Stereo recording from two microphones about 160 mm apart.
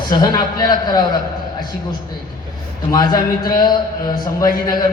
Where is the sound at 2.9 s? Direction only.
25° left (ahead or behind).